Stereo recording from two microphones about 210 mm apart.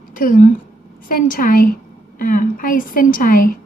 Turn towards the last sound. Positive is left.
turn(degrees=40)  # may be behind; listen again after turning